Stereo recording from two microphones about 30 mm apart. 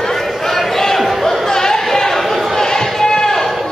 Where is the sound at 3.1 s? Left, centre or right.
Centre.